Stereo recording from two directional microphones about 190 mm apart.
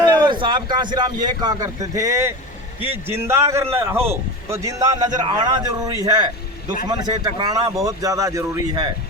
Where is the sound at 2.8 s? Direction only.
10° right (ahead or behind).